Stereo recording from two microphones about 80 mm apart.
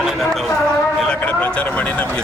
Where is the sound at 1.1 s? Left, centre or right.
Centre.